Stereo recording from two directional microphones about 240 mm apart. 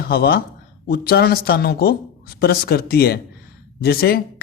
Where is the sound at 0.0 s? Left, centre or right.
Left.